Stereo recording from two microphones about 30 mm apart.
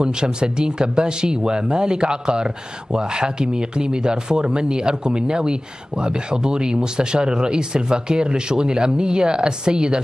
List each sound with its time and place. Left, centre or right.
0.0 s speech: right